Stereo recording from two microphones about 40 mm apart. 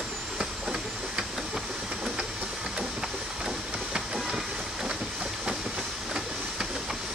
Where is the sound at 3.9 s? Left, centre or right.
Centre.